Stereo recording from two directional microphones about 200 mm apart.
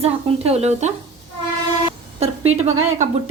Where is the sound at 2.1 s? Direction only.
35° right (ahead or behind).